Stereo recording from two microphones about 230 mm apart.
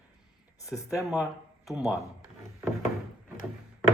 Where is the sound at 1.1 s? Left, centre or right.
Centre.